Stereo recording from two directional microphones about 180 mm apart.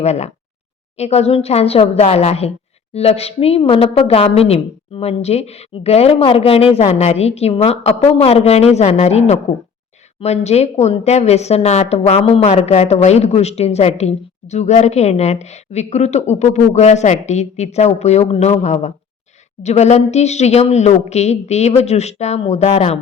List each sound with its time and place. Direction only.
0.0 s a woman's voice: 40° left (ahead or behind)